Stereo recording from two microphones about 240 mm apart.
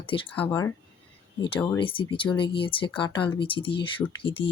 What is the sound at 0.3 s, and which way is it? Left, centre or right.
Speech, centre.